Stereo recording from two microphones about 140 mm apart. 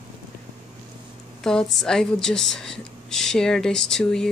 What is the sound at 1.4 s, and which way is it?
A woman's voice, 5° left (ahead or behind).